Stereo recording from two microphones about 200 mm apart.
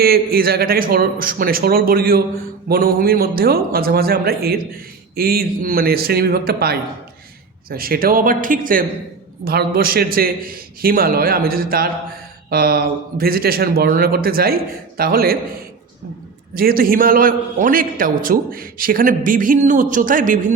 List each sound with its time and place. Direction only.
0.0 s a man's voice: 50° right (ahead or behind)
16.6 s a man's voice: 45° right (ahead or behind)